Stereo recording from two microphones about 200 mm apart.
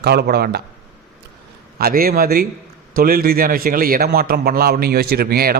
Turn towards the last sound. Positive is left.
turn(degrees=-50)  # may be behind; listen again after turning